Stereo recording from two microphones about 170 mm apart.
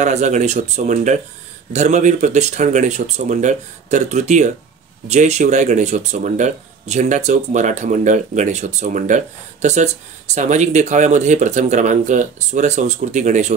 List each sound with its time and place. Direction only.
0.0 s speech: 45° right (ahead or behind)